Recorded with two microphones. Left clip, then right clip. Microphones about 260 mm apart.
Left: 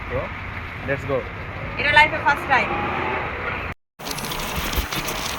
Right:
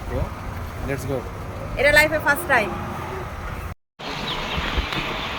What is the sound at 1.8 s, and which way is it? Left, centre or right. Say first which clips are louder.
Speech: even; centre.